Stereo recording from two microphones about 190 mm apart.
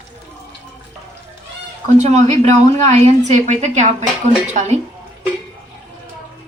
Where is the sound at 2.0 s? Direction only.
35° right (ahead or behind).